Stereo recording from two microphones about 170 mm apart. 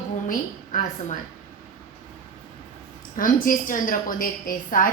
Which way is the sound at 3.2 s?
55° left (ahead or behind).